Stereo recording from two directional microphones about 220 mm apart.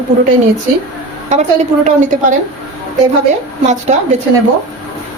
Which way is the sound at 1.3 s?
30° right (ahead or behind).